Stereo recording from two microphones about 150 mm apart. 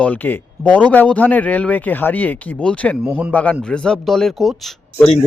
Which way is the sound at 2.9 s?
10° right (ahead or behind).